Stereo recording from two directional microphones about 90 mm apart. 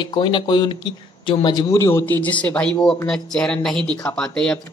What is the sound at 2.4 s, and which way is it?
Speech, 15° left (ahead or behind).